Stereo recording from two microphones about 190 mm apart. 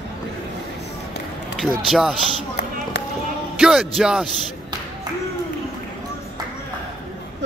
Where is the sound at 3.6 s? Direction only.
Centre (ahead or behind).